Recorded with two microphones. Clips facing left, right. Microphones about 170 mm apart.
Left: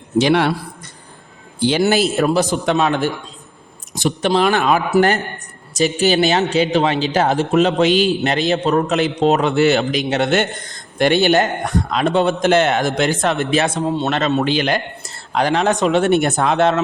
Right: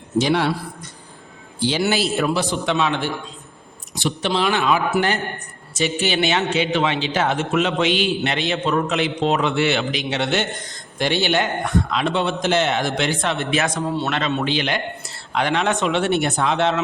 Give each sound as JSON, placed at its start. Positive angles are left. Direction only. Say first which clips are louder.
{"t": 0.2, "sound": "a man's voice", "louder": "left 4 dB", "side_deg": 70}
{"t": 1.5, "sound": "a man's voice", "louder": "left 5 dB", "side_deg": 55}
{"t": 14.1, "sound": "a man's voice", "louder": "left 5 dB", "side_deg": 40}